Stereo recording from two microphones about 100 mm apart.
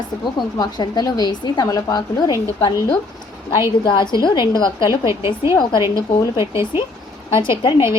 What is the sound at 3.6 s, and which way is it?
A woman's voice, 50° left (ahead or behind).